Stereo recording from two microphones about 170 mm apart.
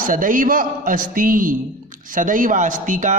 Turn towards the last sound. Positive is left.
turn(degrees=-50)  # may be behind; listen again after turning